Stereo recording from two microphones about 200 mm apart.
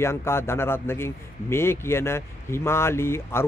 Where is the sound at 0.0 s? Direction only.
10° left (ahead or behind).